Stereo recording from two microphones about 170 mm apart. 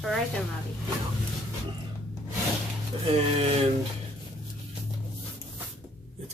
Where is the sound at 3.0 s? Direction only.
35° right (ahead or behind).